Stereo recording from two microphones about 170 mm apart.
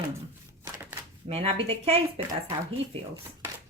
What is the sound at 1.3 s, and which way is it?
Speech, 35° right (ahead or behind).